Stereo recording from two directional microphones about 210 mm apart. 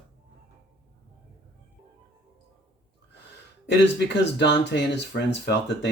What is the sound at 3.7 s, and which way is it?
Speech, 55° left (ahead or behind).